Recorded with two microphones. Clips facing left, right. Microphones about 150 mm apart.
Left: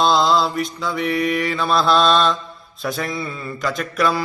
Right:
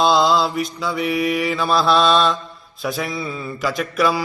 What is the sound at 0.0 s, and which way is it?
Mantra, centre (ahead or behind).